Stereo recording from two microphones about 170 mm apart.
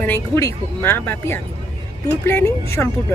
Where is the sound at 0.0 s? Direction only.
15° left (ahead or behind).